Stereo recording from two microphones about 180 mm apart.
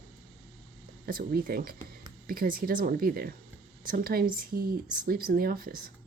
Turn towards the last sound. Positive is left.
turn(degrees=-55)  # may be behind; listen again after turning